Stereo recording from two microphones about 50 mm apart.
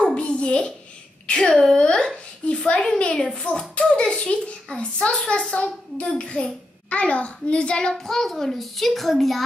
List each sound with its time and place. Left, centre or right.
0.1 s a sound: left
1.4 s a woman's voice: centre
7.9 s a child's voice: centre